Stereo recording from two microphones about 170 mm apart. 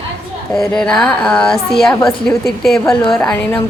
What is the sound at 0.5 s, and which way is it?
A woman's voice, 5° left (ahead or behind).